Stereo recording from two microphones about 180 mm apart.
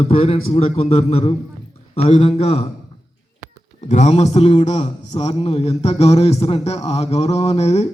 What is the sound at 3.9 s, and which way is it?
A man's voice, 35° left (ahead or behind).